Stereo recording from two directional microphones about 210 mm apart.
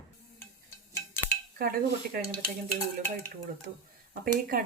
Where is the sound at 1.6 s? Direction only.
45° right (ahead or behind).